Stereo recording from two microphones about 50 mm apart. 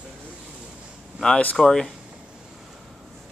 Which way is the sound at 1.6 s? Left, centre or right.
Centre.